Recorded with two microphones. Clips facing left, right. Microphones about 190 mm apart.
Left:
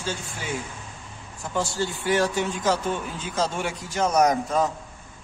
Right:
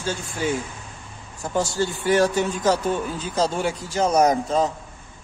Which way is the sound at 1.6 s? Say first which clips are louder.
Right 3 dB; 45° right (ahead or behind).